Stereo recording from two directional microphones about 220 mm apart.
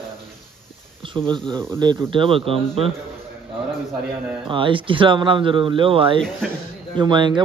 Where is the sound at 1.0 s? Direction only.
20° right (ahead or behind).